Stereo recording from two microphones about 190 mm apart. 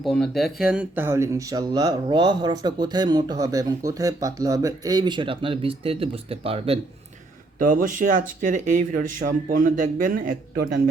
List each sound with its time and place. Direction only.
0.0 s speech: centre (ahead or behind); by 6.7 s 30° right (ahead or behind)
7.7 s speech: 45° right (ahead or behind)